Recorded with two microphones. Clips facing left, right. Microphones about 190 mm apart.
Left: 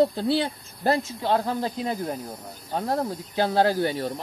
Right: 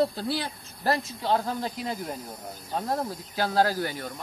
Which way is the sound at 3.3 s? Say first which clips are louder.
Left 3 dB; 25° left (ahead or behind).